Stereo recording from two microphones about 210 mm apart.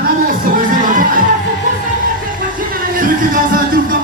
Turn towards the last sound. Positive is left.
turn(degrees=-40)  # may be behind; listen again after turning